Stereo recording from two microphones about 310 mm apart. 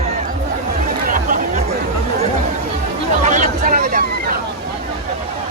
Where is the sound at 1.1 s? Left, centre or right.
Right.